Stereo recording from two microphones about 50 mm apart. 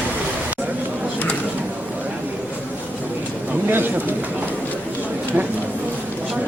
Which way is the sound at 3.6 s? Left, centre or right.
Right.